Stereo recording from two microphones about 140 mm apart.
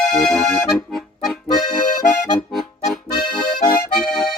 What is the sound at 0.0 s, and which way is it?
Accordion, 5° left (ahead or behind).